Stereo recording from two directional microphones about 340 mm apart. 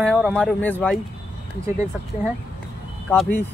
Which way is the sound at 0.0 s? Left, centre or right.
Centre.